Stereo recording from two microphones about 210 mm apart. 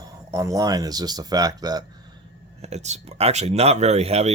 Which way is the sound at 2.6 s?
30° right (ahead or behind).